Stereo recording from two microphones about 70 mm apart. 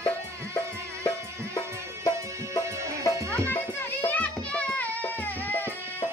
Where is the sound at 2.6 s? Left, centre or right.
Right.